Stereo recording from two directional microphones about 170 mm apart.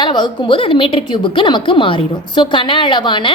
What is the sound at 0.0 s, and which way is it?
A woman's voice, 25° left (ahead or behind).